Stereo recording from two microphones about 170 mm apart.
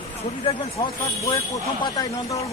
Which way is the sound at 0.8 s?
20° left (ahead or behind).